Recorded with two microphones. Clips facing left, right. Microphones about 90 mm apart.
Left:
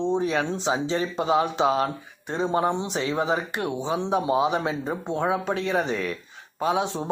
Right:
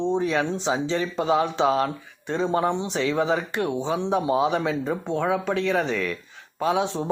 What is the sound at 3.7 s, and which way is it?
Speech, 15° left (ahead or behind).